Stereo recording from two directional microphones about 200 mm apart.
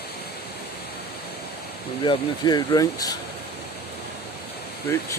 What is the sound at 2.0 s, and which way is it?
Speech, 20° left (ahead or behind).